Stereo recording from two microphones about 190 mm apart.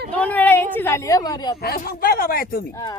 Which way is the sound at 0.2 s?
10° left (ahead or behind).